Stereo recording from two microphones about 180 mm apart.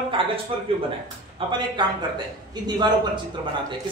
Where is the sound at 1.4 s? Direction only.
30° right (ahead or behind).